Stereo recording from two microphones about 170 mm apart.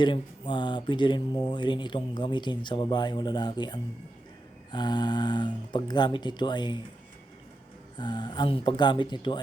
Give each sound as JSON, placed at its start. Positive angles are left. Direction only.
{"t": 0.0, "sound": "speech", "side_deg": 25}
{"t": 7.9, "sound": "speech", "side_deg": 25}